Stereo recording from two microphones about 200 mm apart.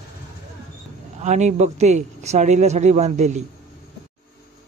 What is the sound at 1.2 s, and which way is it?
Speech, 35° right (ahead or behind).